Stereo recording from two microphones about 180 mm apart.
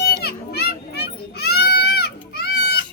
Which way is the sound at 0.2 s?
60° left (ahead or behind).